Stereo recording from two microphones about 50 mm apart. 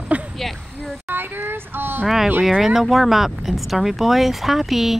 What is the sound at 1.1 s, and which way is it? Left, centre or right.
Child singing, right.